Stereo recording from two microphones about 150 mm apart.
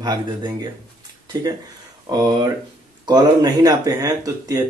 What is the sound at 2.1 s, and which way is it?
Speech, 25° right (ahead or behind).